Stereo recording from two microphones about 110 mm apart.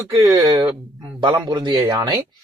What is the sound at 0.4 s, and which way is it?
Speech, 45° right (ahead or behind).